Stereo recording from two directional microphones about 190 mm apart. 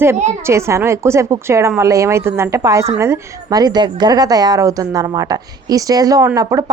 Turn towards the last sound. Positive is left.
turn(degrees=-20)  # may be behind; listen again after turning